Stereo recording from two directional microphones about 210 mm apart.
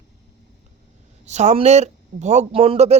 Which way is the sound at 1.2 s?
35° right (ahead or behind).